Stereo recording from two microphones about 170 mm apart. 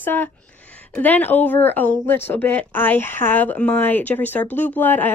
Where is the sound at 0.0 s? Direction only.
10° left (ahead or behind).